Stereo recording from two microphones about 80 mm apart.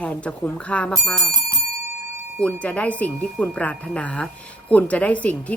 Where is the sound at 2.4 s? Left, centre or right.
Centre.